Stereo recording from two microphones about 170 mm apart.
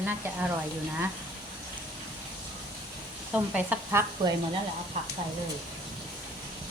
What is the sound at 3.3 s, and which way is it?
Stir, 10° right (ahead or behind).